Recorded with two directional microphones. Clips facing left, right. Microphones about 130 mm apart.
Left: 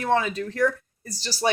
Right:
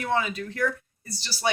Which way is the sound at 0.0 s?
35° left (ahead or behind).